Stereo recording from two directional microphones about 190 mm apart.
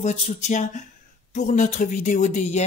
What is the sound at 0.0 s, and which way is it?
Speech, 35° left (ahead or behind).